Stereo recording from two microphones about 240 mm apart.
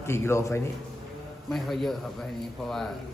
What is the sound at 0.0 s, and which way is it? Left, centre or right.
Speech, centre.